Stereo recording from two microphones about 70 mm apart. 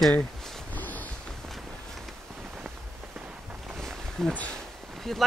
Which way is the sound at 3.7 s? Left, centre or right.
Centre.